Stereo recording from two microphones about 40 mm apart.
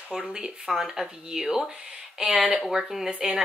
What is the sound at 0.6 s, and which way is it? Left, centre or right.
Speech, centre.